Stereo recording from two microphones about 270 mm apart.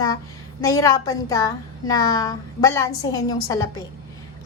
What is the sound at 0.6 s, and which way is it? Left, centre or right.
A woman's voice, centre.